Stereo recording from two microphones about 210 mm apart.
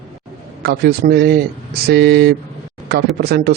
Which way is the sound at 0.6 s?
50° right (ahead or behind).